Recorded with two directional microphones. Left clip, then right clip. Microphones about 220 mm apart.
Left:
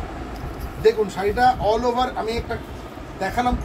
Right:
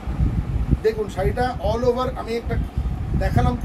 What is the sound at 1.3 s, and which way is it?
Speech, 20° right (ahead or behind).